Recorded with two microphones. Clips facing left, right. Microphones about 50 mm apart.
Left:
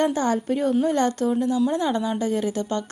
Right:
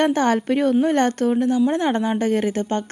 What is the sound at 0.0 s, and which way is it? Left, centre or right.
A woman's voice, right.